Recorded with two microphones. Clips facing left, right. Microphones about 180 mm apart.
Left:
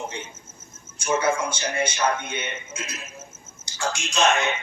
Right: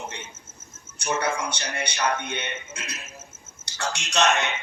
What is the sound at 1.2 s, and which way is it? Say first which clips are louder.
Speech: left 4 dB; 65° right (ahead or behind).